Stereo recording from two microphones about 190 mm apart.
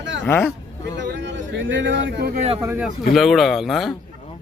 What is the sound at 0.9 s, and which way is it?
A man's voice, 70° right (ahead or behind).